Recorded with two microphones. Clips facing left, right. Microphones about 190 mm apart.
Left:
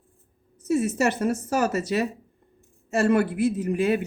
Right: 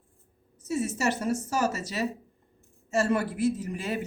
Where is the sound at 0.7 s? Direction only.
55° left (ahead or behind).